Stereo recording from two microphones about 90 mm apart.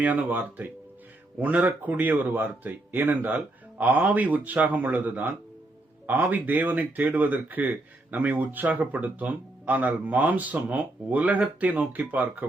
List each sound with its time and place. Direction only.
0.0 s speech: 20° right (ahead or behind)